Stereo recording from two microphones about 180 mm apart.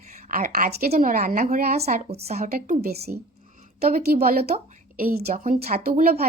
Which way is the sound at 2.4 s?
55° right (ahead or behind).